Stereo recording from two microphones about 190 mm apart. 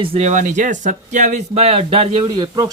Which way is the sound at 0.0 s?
30° right (ahead or behind).